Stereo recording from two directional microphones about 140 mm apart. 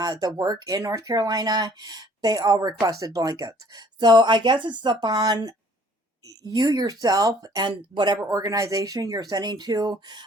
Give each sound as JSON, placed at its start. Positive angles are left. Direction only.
{"t": 0.0, "sound": "speech", "side_deg": -30}